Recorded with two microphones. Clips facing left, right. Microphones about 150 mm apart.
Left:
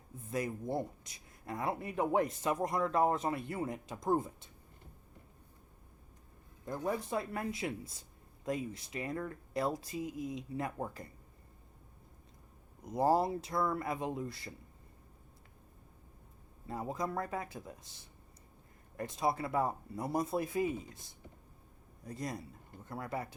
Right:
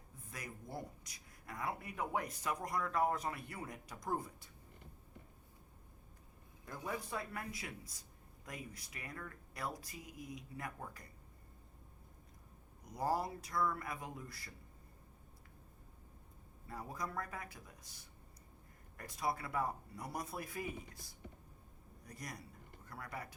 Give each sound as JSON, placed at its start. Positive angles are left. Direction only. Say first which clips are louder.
{"t": 0.3, "sound": "speech", "louder": "left 13 dB", "side_deg": 25}
{"t": 7.0, "sound": "speech", "louder": "left 7 dB", "side_deg": 25}
{"t": 12.8, "sound": "speech", "louder": "left 8 dB", "side_deg": 25}
{"t": 16.6, "sound": "speech", "louder": "left 7 dB", "side_deg": 25}